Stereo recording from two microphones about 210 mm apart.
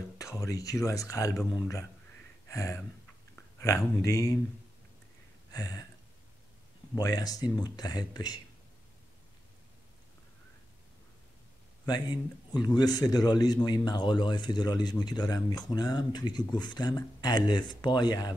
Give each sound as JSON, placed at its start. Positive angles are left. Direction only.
{"t": 0.2, "sound": "speech", "side_deg": 15}
{"t": 5.5, "sound": "speech", "side_deg": 15}
{"t": 7.0, "sound": "speech", "side_deg": 20}
{"t": 11.8, "sound": "speech", "side_deg": 20}